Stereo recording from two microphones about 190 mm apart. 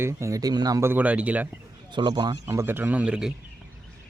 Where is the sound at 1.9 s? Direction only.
25° right (ahead or behind); by 3.3 s 5° right (ahead or behind).